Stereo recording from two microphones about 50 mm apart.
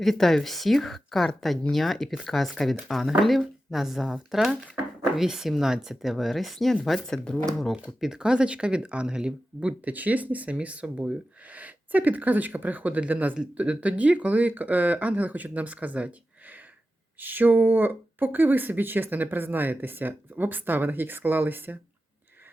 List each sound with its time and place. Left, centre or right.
0.0 s speech: centre
8.0 s speech: centre
9.9 s speech: right